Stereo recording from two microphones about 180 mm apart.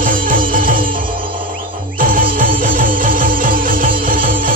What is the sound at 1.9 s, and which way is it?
Music, 50° right (ahead or behind).